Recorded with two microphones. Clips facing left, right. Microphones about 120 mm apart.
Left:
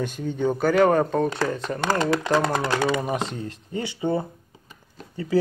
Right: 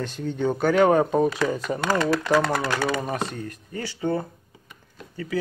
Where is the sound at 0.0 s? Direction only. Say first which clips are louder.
Left 1 dB; 10° left (ahead or behind).